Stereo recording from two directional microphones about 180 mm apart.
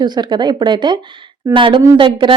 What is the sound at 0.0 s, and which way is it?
Speech, 25° right (ahead or behind).